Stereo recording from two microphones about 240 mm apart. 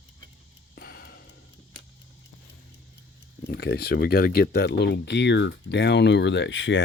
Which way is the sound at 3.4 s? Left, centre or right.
Left.